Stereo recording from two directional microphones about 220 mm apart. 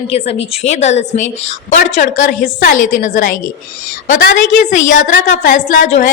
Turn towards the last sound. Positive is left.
turn(degrees=35)  # may be behind; listen again after turning